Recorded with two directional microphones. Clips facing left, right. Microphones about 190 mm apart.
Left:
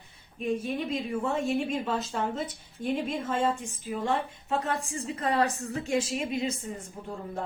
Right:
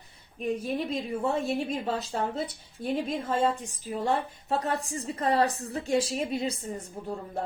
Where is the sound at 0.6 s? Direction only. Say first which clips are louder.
Right 1 dB; 35° right (ahead or behind).